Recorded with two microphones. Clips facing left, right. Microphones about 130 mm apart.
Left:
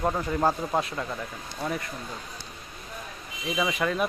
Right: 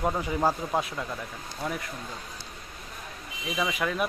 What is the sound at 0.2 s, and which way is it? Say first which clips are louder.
Speech: left 1 dB; 10° right (ahead or behind).